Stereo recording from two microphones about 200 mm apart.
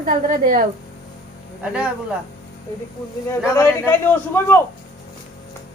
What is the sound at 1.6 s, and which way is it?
Speech, 5° right (ahead or behind).